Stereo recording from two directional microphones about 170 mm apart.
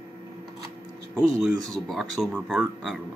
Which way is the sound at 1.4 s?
Centre (ahead or behind).